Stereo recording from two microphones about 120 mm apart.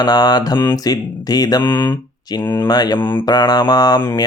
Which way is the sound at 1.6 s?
20° left (ahead or behind).